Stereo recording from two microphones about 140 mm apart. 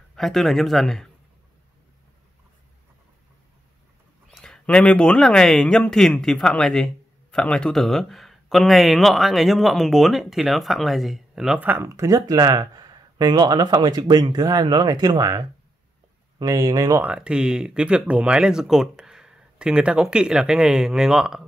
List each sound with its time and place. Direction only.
0.1 s speech: centre (ahead or behind)
4.3 s speech: 5° left (ahead or behind); by 17.0 s 25° right (ahead or behind)
17.0 s speech: 10° right (ahead or behind)